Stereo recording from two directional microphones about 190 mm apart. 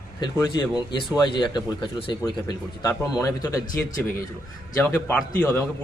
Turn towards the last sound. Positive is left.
turn(degrees=10)  # may be behind; listen again after turning